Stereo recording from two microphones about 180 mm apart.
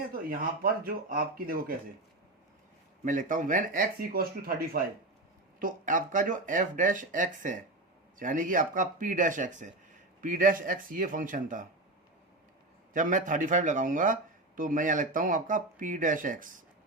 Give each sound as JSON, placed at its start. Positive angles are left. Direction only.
{"t": 0.1, "sound": "speech", "side_deg": -55}
{"t": 3.0, "sound": "speech", "side_deg": -45}
{"t": 12.9, "sound": "speech", "side_deg": -45}